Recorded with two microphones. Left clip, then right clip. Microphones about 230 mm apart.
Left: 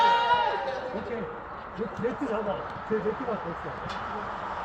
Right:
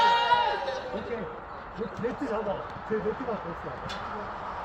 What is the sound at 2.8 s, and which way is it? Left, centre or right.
Speech, centre.